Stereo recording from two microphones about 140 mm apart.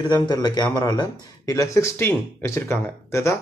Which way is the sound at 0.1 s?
30° left (ahead or behind).